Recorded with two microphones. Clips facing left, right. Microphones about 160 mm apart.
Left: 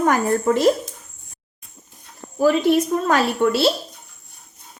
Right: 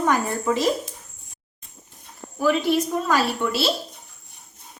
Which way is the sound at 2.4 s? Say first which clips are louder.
Left 4 dB; 50° left (ahead or behind).